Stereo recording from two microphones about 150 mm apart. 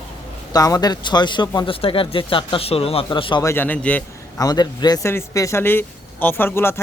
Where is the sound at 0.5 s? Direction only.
25° left (ahead or behind).